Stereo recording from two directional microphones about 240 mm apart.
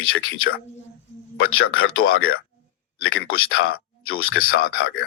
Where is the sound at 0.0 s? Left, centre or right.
Left.